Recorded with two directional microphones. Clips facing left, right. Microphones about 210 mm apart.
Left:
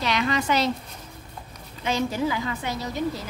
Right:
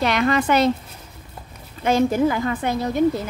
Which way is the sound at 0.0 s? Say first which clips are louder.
Right 5 dB; 55° right (ahead or behind).